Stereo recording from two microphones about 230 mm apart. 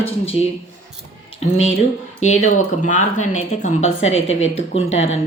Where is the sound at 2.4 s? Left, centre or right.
Left.